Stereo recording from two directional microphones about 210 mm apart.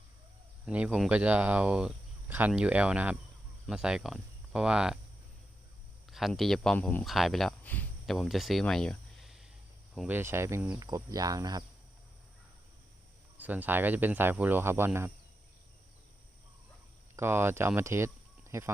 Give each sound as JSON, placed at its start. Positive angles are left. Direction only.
{"t": 0.6, "sound": "speech", "side_deg": -5}
{"t": 6.1, "sound": "speech", "side_deg": 0}
{"t": 13.3, "sound": "speech", "side_deg": -10}
{"t": 17.2, "sound": "speech", "side_deg": -10}